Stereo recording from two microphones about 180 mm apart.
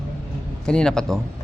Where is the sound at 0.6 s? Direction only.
5° left (ahead or behind).